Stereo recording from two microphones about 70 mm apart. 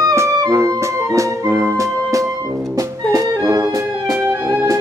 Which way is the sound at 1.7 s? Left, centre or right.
Right.